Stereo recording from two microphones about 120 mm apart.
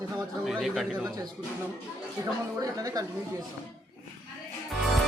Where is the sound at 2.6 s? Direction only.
30° right (ahead or behind).